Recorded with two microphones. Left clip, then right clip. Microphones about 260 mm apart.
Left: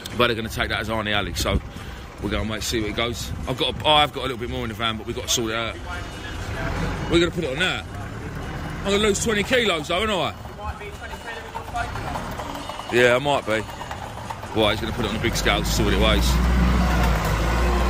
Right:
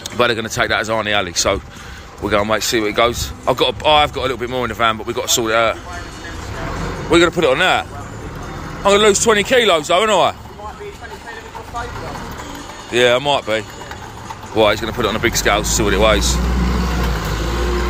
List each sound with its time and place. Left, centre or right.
0.2 s speech: centre
7.1 s speech: centre
8.8 s speech: centre
12.9 s speech: centre
17.5 s vehicle: left